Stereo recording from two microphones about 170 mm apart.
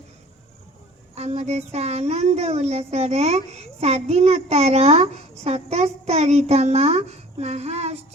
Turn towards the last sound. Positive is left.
turn(degrees=-40)  # may be behind; listen again after turning